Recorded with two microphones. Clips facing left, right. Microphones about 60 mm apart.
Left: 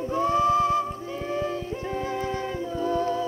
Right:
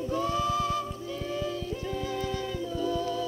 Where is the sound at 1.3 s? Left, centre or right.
Left.